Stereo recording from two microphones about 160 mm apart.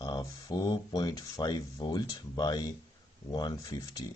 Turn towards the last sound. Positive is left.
turn(degrees=20)  # may be behind; listen again after turning